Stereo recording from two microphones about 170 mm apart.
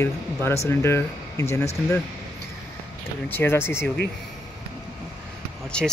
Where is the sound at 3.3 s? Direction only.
15° left (ahead or behind).